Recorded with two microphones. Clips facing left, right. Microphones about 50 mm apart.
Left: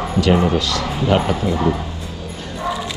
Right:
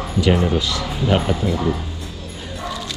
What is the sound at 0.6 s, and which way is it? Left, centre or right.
Speech, centre.